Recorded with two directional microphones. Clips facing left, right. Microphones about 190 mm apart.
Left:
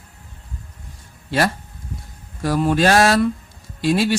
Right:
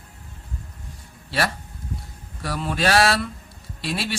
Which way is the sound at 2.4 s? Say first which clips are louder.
Left 7 dB; 45° left (ahead or behind).